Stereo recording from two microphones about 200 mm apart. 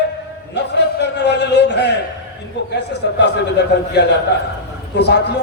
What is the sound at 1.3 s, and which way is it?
Speech, 60° left (ahead or behind).